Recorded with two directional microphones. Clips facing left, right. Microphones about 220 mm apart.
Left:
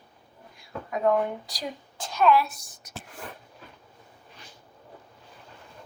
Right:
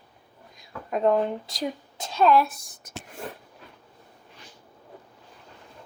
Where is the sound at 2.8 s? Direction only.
50° right (ahead or behind).